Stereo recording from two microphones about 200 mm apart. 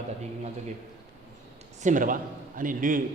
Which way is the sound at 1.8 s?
40° right (ahead or behind).